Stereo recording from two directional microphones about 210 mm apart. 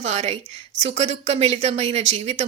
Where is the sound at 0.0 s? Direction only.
30° right (ahead or behind).